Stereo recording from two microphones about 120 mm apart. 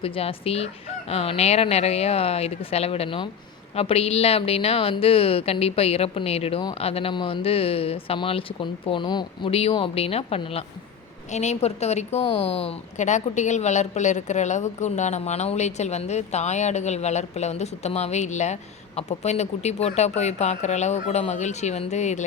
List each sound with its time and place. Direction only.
0.0 s a woman's voice: 50° left (ahead or behind)
9.5 s speech: 55° left (ahead or behind)
11.3 s speech: 70° left (ahead or behind)
13.0 s a woman's voice: 75° left (ahead or behind)